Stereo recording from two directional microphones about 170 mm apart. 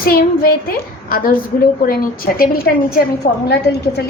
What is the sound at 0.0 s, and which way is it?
A woman's voice, 60° left (ahead or behind).